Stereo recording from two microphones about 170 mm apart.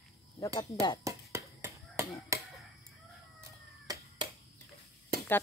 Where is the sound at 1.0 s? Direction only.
20° right (ahead or behind).